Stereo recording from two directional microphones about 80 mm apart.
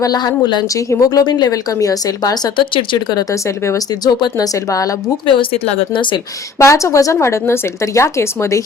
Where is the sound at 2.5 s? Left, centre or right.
Left.